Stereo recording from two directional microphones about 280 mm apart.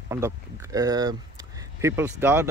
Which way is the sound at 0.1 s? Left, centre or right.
Centre.